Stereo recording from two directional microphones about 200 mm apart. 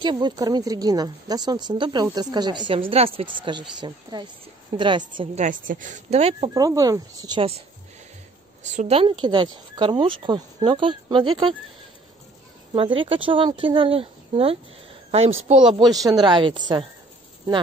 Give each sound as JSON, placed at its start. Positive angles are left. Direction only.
{"t": 0.0, "sound": "speech", "side_deg": -20}
{"t": 5.4, "sound": "speech", "side_deg": -40}
{"t": 6.5, "sound": "speech", "side_deg": -20}
{"t": 8.6, "sound": "speech", "side_deg": -35}
{"t": 12.7, "sound": "a woman's voice", "side_deg": -25}
{"t": 15.8, "sound": "speech", "side_deg": -20}